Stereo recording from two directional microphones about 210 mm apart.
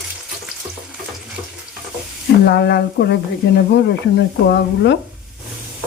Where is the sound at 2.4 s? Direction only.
50° left (ahead or behind).